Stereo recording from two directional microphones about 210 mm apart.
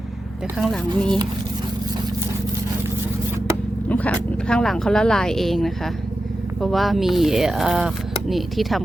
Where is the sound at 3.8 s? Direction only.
5° left (ahead or behind).